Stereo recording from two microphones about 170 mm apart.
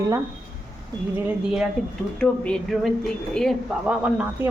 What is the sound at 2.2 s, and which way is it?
Speech, 5° left (ahead or behind).